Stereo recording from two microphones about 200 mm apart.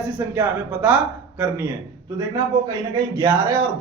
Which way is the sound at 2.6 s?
15° right (ahead or behind).